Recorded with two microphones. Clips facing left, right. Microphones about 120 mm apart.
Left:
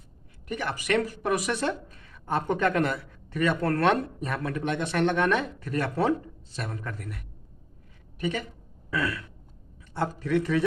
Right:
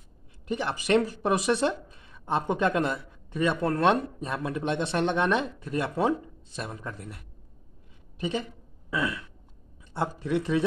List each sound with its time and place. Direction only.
0.5 s speech: 25° right (ahead or behind)
8.9 s a sound: 20° right (ahead or behind)
9.9 s speech: 20° right (ahead or behind)